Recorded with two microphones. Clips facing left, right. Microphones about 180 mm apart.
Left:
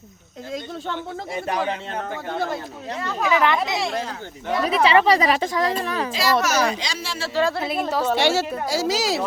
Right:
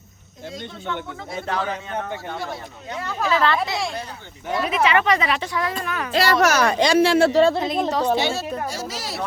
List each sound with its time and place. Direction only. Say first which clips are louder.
1.3 s speech: left 1 dB; 15° left (ahead or behind)
3.0 s a woman's voice: left 1 dB; 5° right (ahead or behind)
3.2 s speech: left 1 dB; 15° left (ahead or behind)
4.6 s speech: left 3 dB; 35° left (ahead or behind)
6.1 s speech: right 5 dB; 60° right (ahead or behind)
7.6 s a woman's voice: right 2 dB; 5° left (ahead or behind)
8.1 s a woman's voice: left 2 dB; 80° left
8.6 s speech: left 7 dB; 90° left